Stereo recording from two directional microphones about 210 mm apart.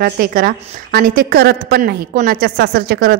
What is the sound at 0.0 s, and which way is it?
A woman's voice, 45° right (ahead or behind).